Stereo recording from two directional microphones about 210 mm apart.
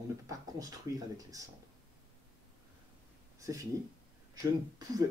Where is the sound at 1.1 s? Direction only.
15° right (ahead or behind).